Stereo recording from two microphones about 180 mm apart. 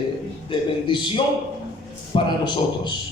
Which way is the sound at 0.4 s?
25° left (ahead or behind).